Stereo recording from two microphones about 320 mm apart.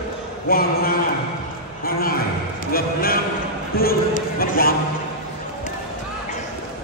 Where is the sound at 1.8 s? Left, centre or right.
Left.